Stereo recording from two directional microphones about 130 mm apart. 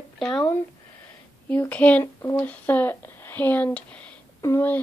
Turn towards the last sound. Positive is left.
turn(degrees=20)  # may be behind; listen again after turning